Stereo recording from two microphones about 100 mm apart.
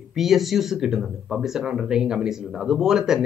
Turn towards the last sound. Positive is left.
turn(degrees=-5)  # may be behind; listen again after turning